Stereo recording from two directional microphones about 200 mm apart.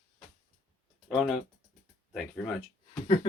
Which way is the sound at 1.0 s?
Centre (ahead or behind).